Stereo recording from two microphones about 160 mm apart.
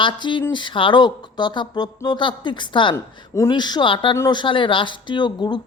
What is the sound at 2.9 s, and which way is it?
Speech, 20° left (ahead or behind).